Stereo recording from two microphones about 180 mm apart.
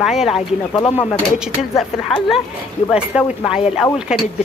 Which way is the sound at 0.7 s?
30° left (ahead or behind).